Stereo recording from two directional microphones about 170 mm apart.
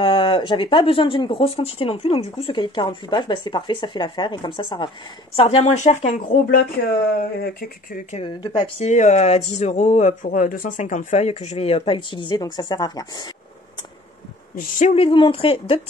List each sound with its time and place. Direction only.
0.0 s speech: 30° left (ahead or behind)
6.5 s speech: 60° left (ahead or behind)
8.3 s speech: 30° left (ahead or behind)
8.8 s speech: 45° left (ahead or behind); by 13.3 s 25° left (ahead or behind)
14.5 s speech: 50° left (ahead or behind)
15.0 s speech: 30° left (ahead or behind)